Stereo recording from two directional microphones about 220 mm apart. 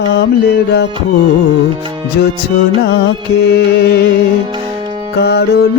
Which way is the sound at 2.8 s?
50° left (ahead or behind).